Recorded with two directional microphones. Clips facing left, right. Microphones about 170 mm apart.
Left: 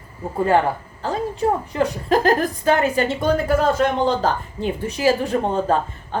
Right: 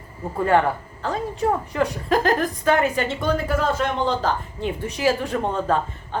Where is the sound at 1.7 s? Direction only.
35° left (ahead or behind).